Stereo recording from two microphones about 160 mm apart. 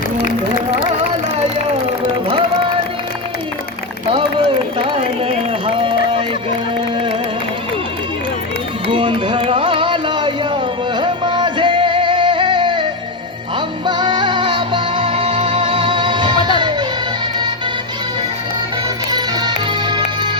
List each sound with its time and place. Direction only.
4.1 s run: 35° right (ahead or behind)
8.9 s music: 35° right (ahead or behind)
13.8 s music: 30° right (ahead or behind)
19.1 s music: 25° right (ahead or behind)